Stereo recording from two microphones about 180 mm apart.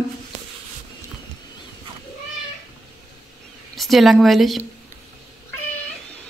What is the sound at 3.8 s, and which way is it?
Speech, centre (ahead or behind).